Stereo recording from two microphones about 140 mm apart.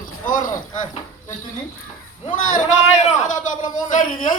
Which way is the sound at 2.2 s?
65° left (ahead or behind).